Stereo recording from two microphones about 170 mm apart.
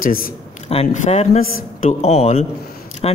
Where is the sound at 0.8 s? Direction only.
45° left (ahead or behind).